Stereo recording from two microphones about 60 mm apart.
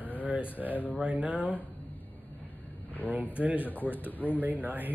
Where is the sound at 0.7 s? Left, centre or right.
Left.